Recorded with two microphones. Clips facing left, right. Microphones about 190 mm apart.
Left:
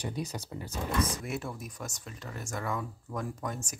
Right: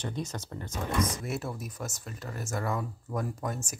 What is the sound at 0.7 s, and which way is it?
Speech, 30° left (ahead or behind).